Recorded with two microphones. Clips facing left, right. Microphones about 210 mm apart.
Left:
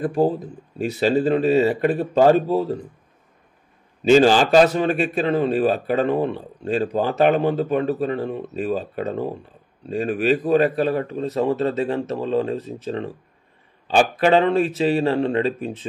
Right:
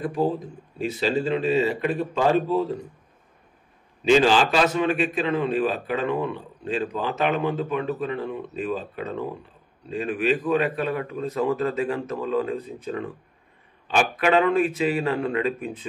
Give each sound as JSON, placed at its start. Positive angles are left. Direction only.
{"t": 0.7, "sound": "a man's voice", "side_deg": 50}
{"t": 4.1, "sound": "a man's voice", "side_deg": 40}